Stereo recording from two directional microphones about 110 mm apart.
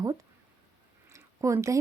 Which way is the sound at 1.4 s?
25° right (ahead or behind).